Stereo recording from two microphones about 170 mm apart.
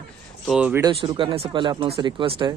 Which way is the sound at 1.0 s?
30° right (ahead or behind).